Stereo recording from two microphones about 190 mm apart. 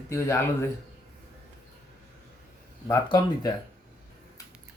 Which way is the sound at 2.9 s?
20° left (ahead or behind).